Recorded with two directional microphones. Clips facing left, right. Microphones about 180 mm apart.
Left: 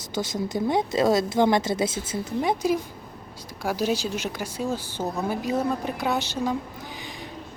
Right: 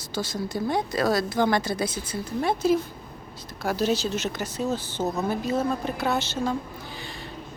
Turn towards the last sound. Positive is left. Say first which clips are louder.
# even
turn(degrees=15)  # may be behind; listen again after turning